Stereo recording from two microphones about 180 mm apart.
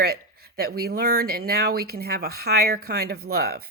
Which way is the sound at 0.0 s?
60° right (ahead or behind).